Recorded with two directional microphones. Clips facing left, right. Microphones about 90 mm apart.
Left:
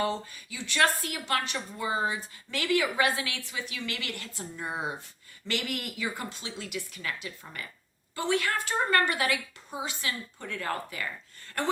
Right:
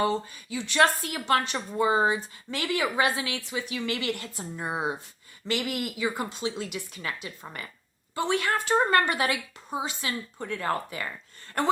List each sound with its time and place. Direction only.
0.5 s a woman's voice: 30° right (ahead or behind)